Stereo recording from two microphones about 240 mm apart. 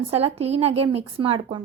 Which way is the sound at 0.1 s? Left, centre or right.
Right.